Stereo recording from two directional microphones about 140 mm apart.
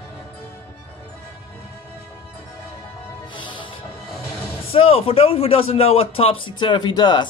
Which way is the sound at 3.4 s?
35° left (ahead or behind).